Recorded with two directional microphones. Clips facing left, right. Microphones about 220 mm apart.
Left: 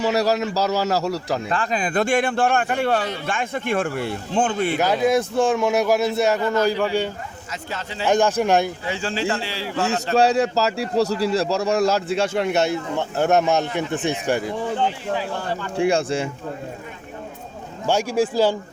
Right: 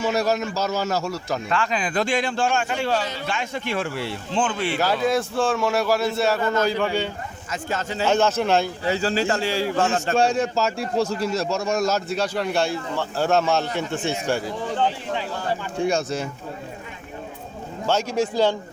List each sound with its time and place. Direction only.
0.0 s speech: 35° left (ahead or behind)
1.9 s a man's voice: 55° left (ahead or behind)
4.8 s a man's voice: 20° left (ahead or behind)
7.5 s a man's voice: 45° right (ahead or behind)
8.0 s a man's voice: 15° left (ahead or behind)
8.8 s a man's voice: 40° right (ahead or behind)
10.2 s speech: 35° left (ahead or behind); by 14.8 s 15° left (ahead or behind)
15.9 s speech: 30° left (ahead or behind)
17.8 s a man's voice: 10° left (ahead or behind)